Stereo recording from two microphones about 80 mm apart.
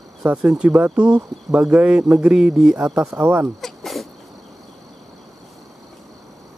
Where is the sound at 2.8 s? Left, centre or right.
Right.